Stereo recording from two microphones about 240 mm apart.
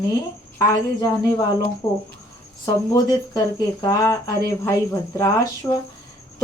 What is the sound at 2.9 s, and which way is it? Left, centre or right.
Speech, centre.